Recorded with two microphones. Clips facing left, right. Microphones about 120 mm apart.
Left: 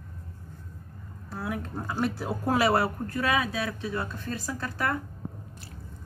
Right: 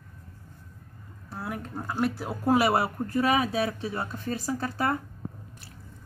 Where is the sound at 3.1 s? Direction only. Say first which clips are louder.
Right 4 dB; 25° right (ahead or behind).